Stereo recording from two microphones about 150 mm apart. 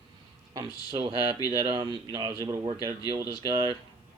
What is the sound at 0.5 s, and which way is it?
A man's voice, 35° right (ahead or behind).